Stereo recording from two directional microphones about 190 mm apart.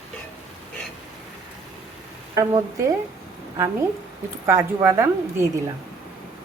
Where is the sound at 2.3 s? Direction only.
20° right (ahead or behind).